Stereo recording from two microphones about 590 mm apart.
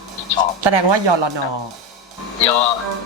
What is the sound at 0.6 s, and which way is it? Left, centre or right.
Speech, right.